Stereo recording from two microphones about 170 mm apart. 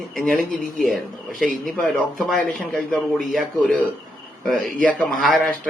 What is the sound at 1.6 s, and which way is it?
Speech, 5° left (ahead or behind).